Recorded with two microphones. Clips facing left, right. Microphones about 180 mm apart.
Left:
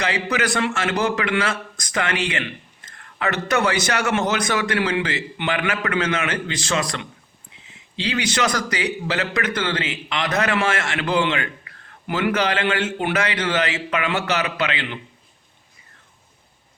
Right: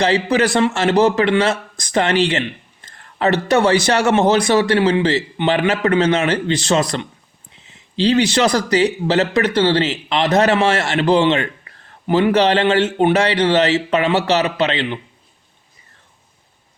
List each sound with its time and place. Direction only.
0.0 s a man's voice: 30° right (ahead or behind)